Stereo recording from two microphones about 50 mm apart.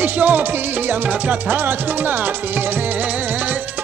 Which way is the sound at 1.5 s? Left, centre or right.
Right.